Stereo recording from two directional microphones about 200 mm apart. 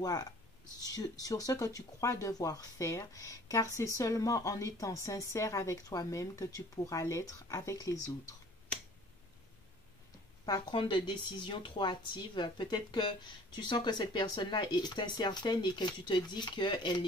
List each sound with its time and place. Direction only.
0.0 s speech: 20° left (ahead or behind)
10.4 s speech: 20° left (ahead or behind)